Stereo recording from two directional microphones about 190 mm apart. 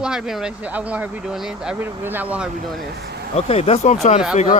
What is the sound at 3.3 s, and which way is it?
Speech, 35° left (ahead or behind).